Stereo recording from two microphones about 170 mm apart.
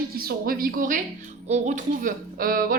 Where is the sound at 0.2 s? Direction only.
60° right (ahead or behind).